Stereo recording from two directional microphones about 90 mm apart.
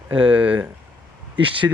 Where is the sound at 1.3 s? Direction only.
70° right (ahead or behind).